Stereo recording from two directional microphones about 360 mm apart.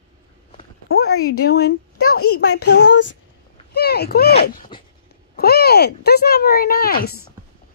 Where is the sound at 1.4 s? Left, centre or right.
Left.